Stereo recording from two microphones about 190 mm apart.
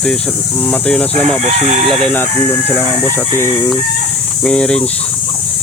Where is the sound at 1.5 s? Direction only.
35° right (ahead or behind).